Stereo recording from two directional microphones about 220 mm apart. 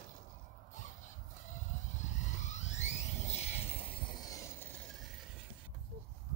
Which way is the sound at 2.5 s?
30° left (ahead or behind).